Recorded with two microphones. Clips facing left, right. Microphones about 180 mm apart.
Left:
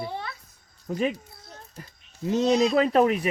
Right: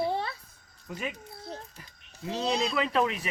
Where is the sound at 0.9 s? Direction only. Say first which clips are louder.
Left 10 dB; 40° left (ahead or behind).